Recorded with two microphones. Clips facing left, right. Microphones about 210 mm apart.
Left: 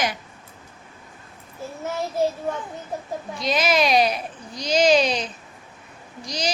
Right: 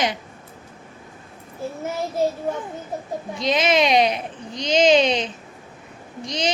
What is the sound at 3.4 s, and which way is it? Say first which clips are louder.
Speech: right 2 dB; 25° right (ahead or behind).